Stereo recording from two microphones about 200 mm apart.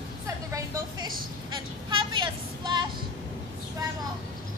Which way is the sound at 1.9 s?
25° right (ahead or behind).